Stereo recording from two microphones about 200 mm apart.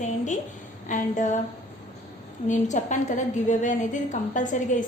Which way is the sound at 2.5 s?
35° left (ahead or behind).